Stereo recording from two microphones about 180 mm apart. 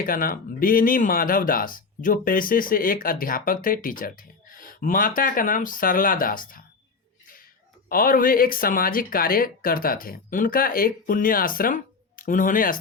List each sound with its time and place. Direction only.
0.0 s speech: 50° left (ahead or behind)
7.9 s speech: 55° left (ahead or behind)